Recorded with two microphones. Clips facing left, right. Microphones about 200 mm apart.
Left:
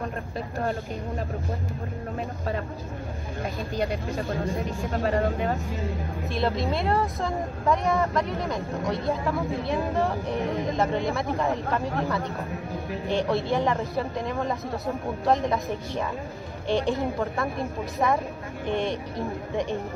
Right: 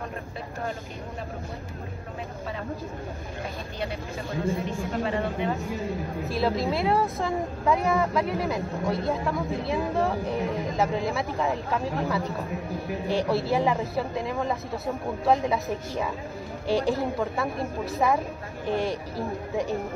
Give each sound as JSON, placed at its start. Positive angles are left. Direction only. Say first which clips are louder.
{"t": 3.7, "sound": "speech", "louder": "left 6 dB", "side_deg": 40}
{"t": 4.5, "sound": "speech", "louder": "right 1 dB", "side_deg": 0}
{"t": 4.9, "sound": "speech", "louder": "left 4 dB", "side_deg": 50}
{"t": 6.3, "sound": "speech", "louder": "right 1 dB", "side_deg": 0}
{"t": 13.3, "sound": "speech", "louder": "right 1 dB", "side_deg": 0}
{"t": 16.7, "sound": "speech", "louder": "even", "side_deg": -35}
{"t": 17.2, "sound": "speech", "louder": "even", "side_deg": 0}